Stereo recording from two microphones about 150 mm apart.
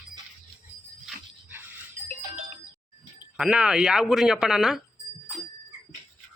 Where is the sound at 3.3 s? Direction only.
5° right (ahead or behind).